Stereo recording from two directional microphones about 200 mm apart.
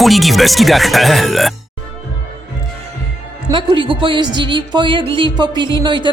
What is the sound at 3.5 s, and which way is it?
Music, 25° right (ahead or behind).